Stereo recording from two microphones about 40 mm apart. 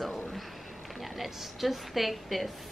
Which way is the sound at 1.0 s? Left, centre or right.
Centre.